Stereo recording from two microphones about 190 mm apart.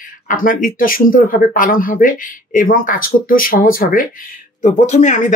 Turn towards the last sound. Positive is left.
turn(degrees=40)  # may be behind; listen again after turning